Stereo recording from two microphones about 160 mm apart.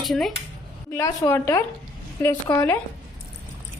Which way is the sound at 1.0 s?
20° left (ahead or behind).